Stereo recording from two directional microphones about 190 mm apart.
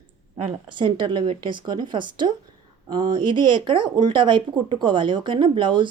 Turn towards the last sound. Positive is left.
turn(degrees=-25)  # may be behind; listen again after turning